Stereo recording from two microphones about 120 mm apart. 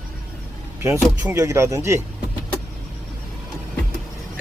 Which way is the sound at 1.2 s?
25° right (ahead or behind).